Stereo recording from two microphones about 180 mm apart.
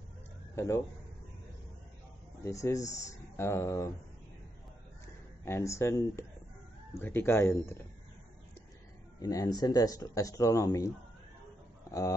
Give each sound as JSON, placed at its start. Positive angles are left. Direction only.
{"t": 2.4, "sound": "speech", "side_deg": 15}
{"t": 5.4, "sound": "speech", "side_deg": 15}
{"t": 9.2, "sound": "speech", "side_deg": 20}
{"t": 11.9, "sound": "speech", "side_deg": 20}